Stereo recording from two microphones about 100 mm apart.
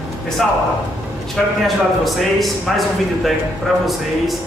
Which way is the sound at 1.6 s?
Centre (ahead or behind).